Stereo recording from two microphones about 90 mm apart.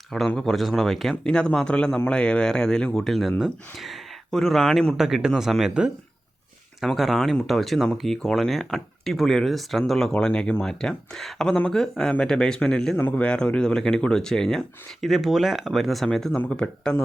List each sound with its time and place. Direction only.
0.1 s speech: 5° left (ahead or behind)
4.9 s speech: 5° right (ahead or behind)
13.0 s a man's voice: 20° left (ahead or behind)
13.2 s speech: 10° left (ahead or behind)